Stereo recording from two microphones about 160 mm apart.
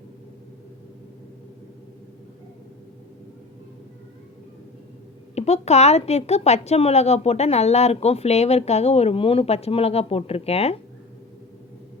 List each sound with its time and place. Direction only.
5.3 s speech: 45° left (ahead or behind)